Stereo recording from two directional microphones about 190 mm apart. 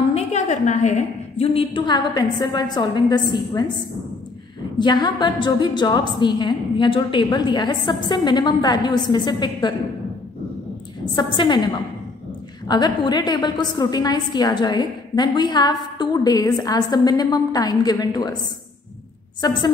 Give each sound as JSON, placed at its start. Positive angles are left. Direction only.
{"t": 0.1, "sound": "a woman's voice", "side_deg": 35}
{"t": 4.7, "sound": "a woman's voice", "side_deg": 25}
{"t": 11.1, "sound": "a woman's voice", "side_deg": 25}
{"t": 12.6, "sound": "a woman's voice", "side_deg": 20}